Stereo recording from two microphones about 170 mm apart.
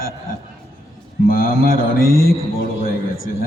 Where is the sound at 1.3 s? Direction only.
55° left (ahead or behind).